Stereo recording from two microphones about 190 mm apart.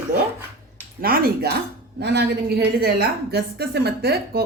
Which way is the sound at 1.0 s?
50° right (ahead or behind).